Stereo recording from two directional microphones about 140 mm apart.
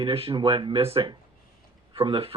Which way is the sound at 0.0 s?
45° right (ahead or behind).